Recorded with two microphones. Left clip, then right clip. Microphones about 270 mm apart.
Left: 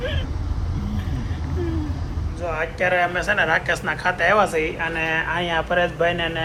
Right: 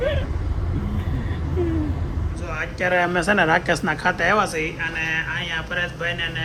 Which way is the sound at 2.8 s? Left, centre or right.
Right.